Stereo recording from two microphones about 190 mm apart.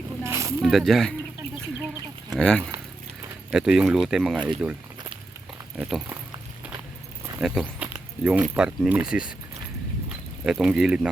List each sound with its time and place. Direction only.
0.2 s snake: 15° right (ahead or behind)
0.6 s speech: centre (ahead or behind)
2.3 s speech: 5° left (ahead or behind)
5.7 s speech: centre (ahead or behind)
7.3 s speech: 5° right (ahead or behind)
10.4 s speech: 5° right (ahead or behind)